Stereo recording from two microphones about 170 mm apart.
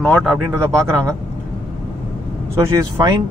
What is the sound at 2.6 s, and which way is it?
Speech, 20° right (ahead or behind).